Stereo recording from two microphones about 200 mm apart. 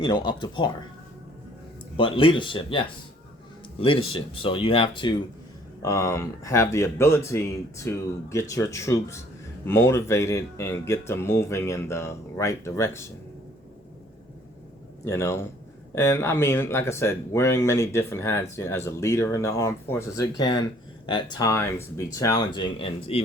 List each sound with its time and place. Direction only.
0.0 s speech: 25° left (ahead or behind)
2.0 s speech: 25° left (ahead or behind)
5.8 s speech: 15° left (ahead or behind)
15.0 s speech: 15° left (ahead or behind)